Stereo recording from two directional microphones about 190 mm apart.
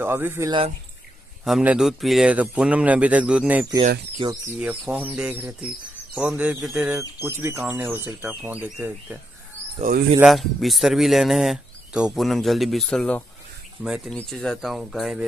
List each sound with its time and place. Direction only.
0.0 s speech: 10° right (ahead or behind)
4.2 s speech: 25° right (ahead or behind)
4.6 s speech: 5° right (ahead or behind)
10.2 s speech: centre (ahead or behind)